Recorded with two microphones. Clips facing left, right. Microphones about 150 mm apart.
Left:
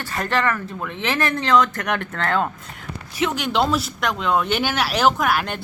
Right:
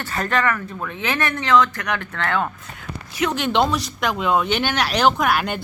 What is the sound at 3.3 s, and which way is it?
Speech, 5° left (ahead or behind).